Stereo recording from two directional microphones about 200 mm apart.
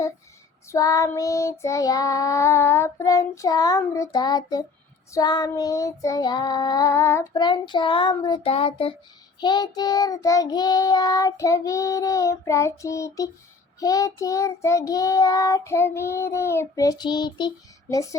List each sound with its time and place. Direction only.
0.7 s child singing: 15° left (ahead or behind)
17.8 s speech: 15° left (ahead or behind)